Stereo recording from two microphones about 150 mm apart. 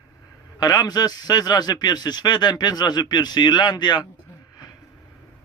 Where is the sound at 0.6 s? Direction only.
25° left (ahead or behind).